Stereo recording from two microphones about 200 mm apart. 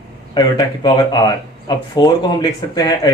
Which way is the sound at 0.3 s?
20° left (ahead or behind).